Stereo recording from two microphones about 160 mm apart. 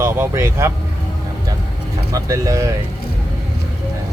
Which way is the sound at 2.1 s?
20° right (ahead or behind).